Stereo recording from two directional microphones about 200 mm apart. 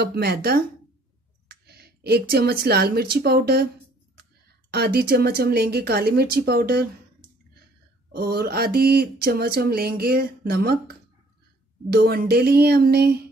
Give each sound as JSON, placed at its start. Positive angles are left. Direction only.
{"t": 0.0, "sound": "speech", "side_deg": -50}
{"t": 8.1, "sound": "speech", "side_deg": -50}